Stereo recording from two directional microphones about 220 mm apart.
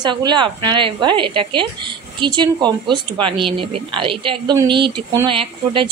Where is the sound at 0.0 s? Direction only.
20° right (ahead or behind).